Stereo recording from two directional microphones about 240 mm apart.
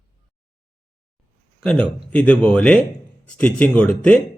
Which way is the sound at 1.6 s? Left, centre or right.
Centre.